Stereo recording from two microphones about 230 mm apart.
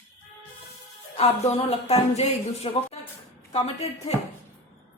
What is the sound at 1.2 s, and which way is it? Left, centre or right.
Speech, left.